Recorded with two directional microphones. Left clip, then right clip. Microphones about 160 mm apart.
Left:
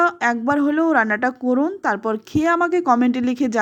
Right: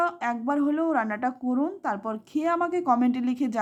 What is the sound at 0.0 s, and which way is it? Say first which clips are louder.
A woman's voice: left 8 dB; 30° left (ahead or behind).